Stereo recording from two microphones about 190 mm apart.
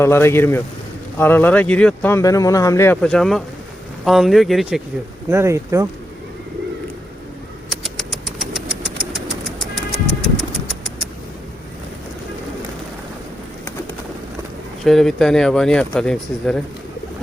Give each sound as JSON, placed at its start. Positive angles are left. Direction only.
{"t": 0.0, "sound": "speech", "side_deg": 15}
{"t": 5.3, "sound": "speech", "side_deg": -15}
{"t": 7.7, "sound": "vehicle", "side_deg": 0}
{"t": 14.8, "sound": "speech", "side_deg": 0}